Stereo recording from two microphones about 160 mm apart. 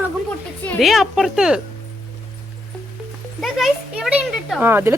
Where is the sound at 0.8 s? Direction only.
Centre (ahead or behind).